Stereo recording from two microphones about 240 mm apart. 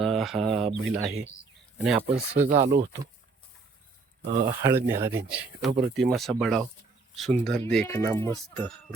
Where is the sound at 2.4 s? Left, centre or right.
Right.